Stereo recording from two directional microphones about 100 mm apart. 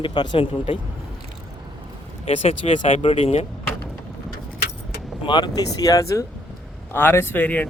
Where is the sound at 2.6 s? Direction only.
90° left.